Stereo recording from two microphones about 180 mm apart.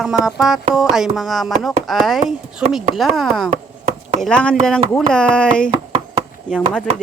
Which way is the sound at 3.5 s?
40° right (ahead or behind).